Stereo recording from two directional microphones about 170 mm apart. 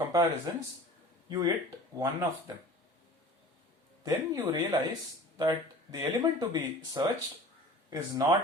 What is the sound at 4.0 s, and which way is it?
Speech, 20° right (ahead or behind).